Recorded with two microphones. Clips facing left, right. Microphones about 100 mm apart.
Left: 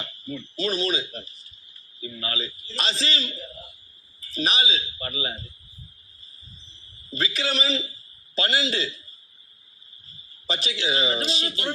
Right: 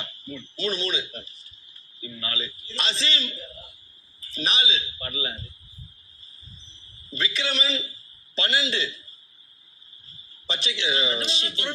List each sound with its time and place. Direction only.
0.5 s a man's voice: 40° left (ahead or behind)
7.2 s a man's voice: 40° left (ahead or behind)
10.4 s a man's voice: 40° left (ahead or behind)